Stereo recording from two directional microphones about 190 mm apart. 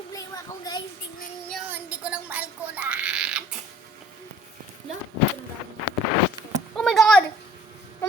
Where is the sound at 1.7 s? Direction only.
10° right (ahead or behind).